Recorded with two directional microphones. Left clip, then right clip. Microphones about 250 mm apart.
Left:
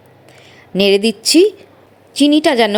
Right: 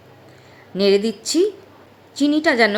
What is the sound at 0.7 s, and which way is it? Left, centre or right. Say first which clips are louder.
A woman's voice: left 4 dB; left.